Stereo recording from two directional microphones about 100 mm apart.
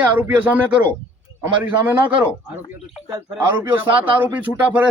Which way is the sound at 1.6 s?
20° right (ahead or behind).